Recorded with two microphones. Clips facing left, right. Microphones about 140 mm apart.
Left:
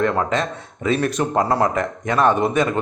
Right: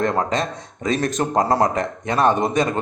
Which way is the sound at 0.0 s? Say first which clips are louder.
Left 1 dB; 35° right (ahead or behind).